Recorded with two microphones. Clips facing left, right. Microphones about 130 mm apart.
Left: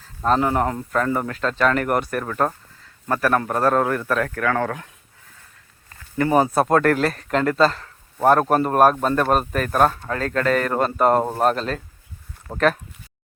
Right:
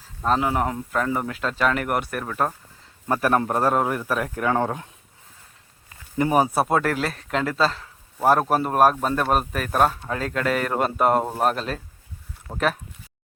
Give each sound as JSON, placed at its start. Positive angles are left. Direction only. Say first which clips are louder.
{"t": 0.3, "sound": "speech", "louder": "left 3 dB", "side_deg": -5}
{"t": 3.1, "sound": "speech", "louder": "left 1 dB", "side_deg": -20}
{"t": 5.9, "sound": "speech", "louder": "left 2 dB", "side_deg": -15}
{"t": 12.5, "sound": "speech", "louder": "left 4 dB", "side_deg": 20}